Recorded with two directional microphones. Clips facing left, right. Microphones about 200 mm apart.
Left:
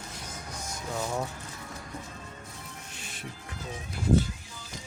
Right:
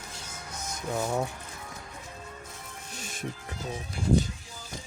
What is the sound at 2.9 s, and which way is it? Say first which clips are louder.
Music: right 9 dB; 45° right (ahead or behind).